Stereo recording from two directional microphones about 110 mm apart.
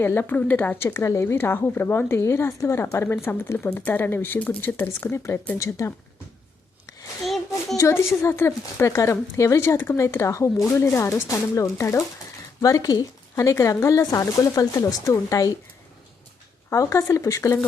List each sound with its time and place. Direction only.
0.0 s speech: 20° left (ahead or behind)
7.8 s speech: 25° left (ahead or behind)
16.6 s speech: 25° left (ahead or behind)